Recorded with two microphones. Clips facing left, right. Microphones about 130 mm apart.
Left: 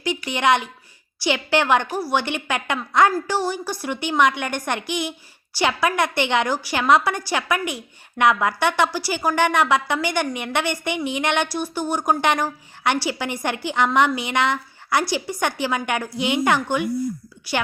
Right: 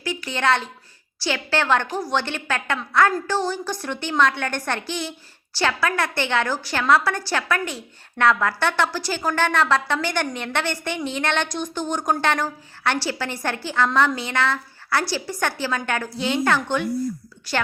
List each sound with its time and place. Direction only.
0.0 s speech: 20° left (ahead or behind)